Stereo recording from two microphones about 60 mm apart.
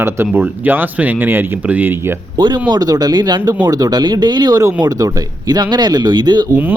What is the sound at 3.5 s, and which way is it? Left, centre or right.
Speech, right.